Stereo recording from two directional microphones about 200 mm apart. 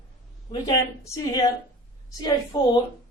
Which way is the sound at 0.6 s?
20° left (ahead or behind).